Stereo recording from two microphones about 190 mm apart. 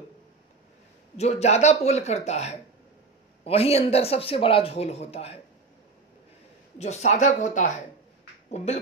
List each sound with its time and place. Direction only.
1.1 s speech: 35° left (ahead or behind)
6.8 s speech: 35° left (ahead or behind)